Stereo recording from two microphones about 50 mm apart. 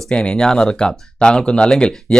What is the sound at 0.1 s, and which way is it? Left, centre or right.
Speech, left.